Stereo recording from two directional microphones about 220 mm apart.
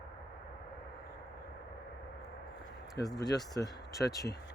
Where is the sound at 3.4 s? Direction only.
15° left (ahead or behind).